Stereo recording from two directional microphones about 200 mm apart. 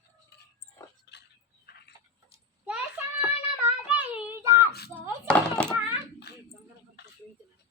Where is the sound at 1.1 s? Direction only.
60° left (ahead or behind).